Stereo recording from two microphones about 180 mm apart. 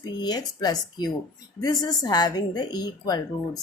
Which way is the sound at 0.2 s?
20° left (ahead or behind).